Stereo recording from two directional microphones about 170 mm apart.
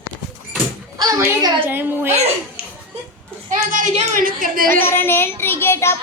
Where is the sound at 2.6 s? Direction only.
65° right (ahead or behind).